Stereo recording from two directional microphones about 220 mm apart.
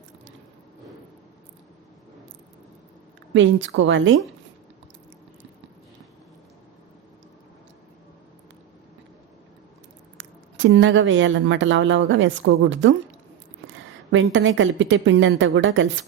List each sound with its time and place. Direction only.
3.3 s speech: 55° right (ahead or behind)
10.2 s speech: 55° right (ahead or behind)